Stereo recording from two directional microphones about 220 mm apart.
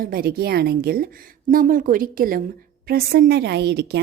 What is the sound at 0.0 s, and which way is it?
A woman's voice, 45° right (ahead or behind).